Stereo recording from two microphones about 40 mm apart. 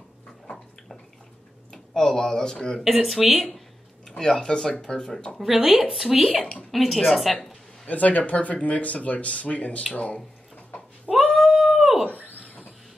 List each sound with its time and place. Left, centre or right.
2.0 s speech: centre
2.8 s speech: centre
4.2 s speech: centre
5.3 s a woman's voice: centre
7.8 s speech: left
11.3 s cat: centre